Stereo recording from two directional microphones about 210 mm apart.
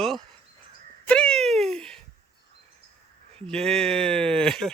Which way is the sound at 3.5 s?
Centre (ahead or behind).